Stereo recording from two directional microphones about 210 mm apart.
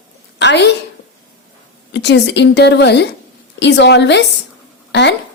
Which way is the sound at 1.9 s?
55° left (ahead or behind).